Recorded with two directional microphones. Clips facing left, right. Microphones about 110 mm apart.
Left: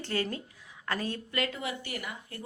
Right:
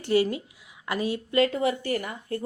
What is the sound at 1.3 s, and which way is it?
Speech, 35° right (ahead or behind).